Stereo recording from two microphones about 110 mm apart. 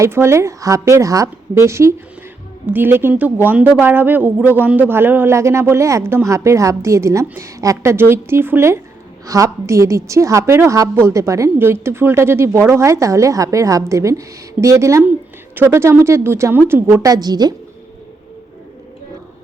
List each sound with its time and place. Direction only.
0.0 s speech: 25° right (ahead or behind)